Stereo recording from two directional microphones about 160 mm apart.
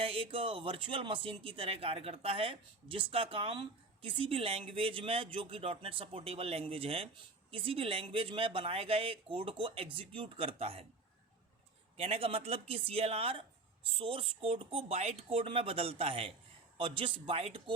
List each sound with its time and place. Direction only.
0.0 s speech: 35° right (ahead or behind)
11.9 s speech: 40° right (ahead or behind)